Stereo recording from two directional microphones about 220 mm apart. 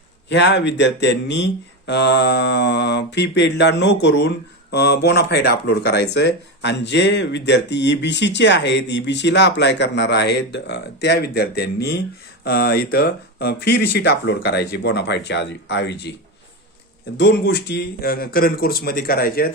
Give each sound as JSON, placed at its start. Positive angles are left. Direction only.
{"t": 0.3, "sound": "mantra", "side_deg": 55}
{"t": 17.2, "sound": "mantra", "side_deg": 45}